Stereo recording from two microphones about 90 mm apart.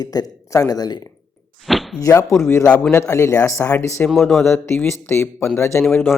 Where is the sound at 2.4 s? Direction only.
30° left (ahead or behind).